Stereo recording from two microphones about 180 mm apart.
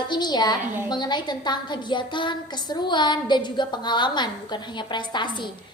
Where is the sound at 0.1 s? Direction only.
25° left (ahead or behind).